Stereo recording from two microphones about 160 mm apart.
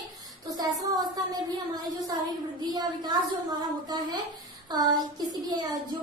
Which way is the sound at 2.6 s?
25° right (ahead or behind).